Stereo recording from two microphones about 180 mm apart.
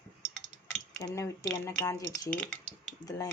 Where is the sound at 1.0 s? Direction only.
15° left (ahead or behind).